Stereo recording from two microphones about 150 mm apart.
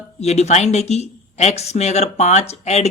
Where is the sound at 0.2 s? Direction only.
45° left (ahead or behind).